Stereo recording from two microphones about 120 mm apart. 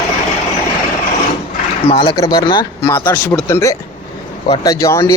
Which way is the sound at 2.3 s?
40° left (ahead or behind).